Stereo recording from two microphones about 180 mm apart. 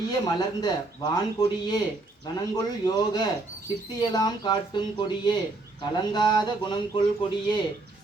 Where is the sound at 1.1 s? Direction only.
20° left (ahead or behind).